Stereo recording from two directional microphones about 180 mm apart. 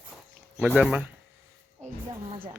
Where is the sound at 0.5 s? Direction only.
5° right (ahead or behind).